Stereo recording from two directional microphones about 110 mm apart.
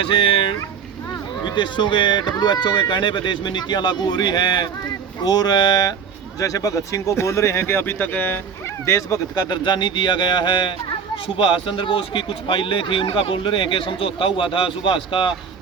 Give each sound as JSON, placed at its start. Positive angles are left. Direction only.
{"t": 0.0, "sound": "speech", "side_deg": 55}